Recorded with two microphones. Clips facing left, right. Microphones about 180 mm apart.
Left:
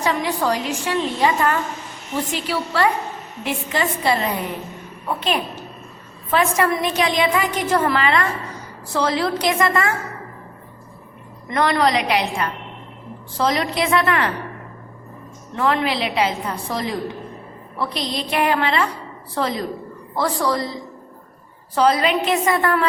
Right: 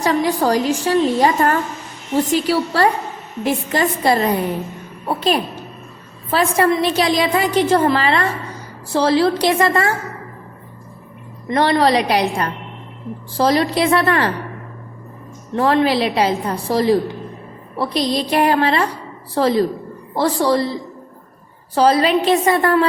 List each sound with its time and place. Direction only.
0.0 s a woman's voice: 40° right (ahead or behind)
11.4 s a woman's voice: 30° right (ahead or behind)
15.5 s a woman's voice: 35° right (ahead or behind)
21.8 s a woman's voice: 35° right (ahead or behind)